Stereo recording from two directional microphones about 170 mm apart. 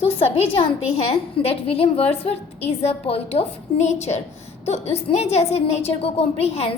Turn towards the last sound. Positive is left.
turn(degrees=35)  # may be behind; listen again after turning